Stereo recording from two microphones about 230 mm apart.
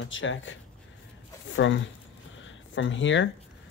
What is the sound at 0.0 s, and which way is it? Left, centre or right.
Speech, left.